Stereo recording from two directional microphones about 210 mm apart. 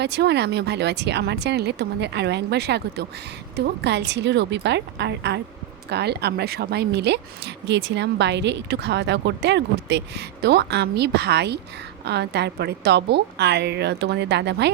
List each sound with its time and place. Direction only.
0.0 s a woman's voice: 55° right (ahead or behind)